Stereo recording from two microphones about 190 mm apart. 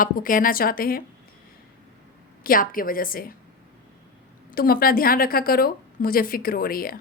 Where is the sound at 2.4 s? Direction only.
50° left (ahead or behind).